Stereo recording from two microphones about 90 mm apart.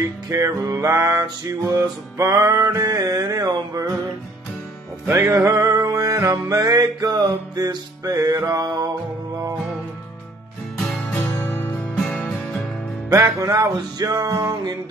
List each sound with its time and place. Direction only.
0.3 s music: 40° right (ahead or behind)
5.0 s music: 30° right (ahead or behind); by 8.8 s 45° right (ahead or behind)
10.8 s music: 5° left (ahead or behind)
11.2 s music: 25° left (ahead or behind)
13.1 s music: 40° right (ahead or behind)